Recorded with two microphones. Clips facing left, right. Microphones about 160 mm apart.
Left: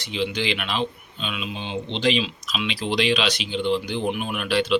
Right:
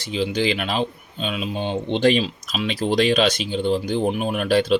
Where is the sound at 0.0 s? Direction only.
40° right (ahead or behind).